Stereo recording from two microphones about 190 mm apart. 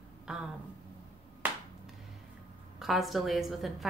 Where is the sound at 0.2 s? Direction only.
5° right (ahead or behind).